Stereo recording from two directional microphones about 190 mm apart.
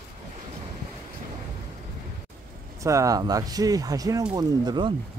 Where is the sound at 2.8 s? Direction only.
15° right (ahead or behind).